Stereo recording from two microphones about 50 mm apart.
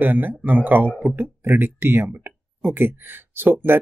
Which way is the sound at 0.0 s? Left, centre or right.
Right.